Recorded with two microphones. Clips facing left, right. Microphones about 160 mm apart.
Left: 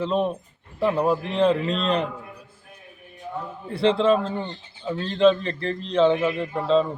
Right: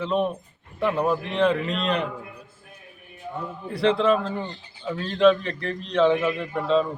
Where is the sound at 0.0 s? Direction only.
30° left (ahead or behind).